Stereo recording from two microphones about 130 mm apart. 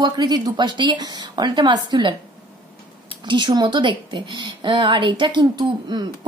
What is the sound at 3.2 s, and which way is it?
A woman's voice, 35° right (ahead or behind).